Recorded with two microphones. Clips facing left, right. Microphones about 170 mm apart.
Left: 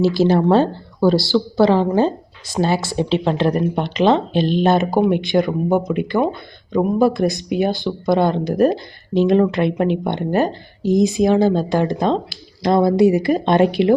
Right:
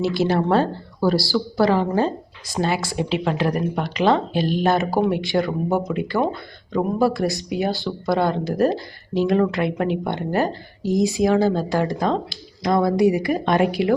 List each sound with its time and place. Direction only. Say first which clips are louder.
0.3 s speech: left 4 dB; 25° left (ahead or behind)